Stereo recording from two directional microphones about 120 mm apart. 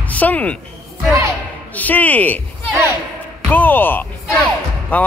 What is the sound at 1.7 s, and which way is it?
Speech, 15° left (ahead or behind).